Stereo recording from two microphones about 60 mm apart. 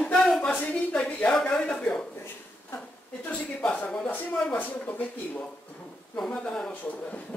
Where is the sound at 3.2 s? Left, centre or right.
Left.